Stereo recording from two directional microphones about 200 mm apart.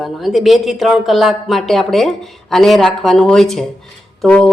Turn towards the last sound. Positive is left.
turn(degrees=5)  # may be behind; listen again after turning